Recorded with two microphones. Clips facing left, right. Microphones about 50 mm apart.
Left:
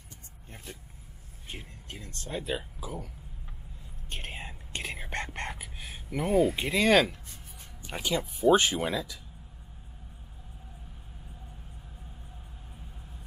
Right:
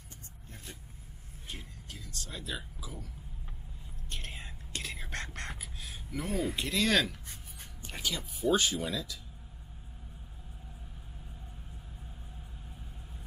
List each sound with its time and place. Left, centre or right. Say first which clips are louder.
1.9 s a sound: left 7 dB; left
4.1 s whispering: left 4 dB; left
7.9 s speech: left 6 dB; left
8.9 s speech: left 4 dB; left